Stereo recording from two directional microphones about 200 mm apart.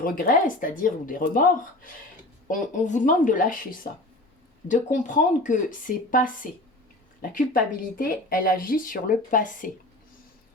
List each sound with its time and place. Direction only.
0.0 s speech: 45° left (ahead or behind)